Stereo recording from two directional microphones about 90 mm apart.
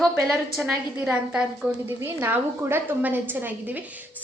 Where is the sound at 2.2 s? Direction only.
25° right (ahead or behind).